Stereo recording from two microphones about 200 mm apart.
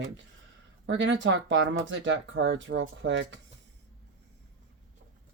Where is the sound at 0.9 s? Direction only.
65° right (ahead or behind).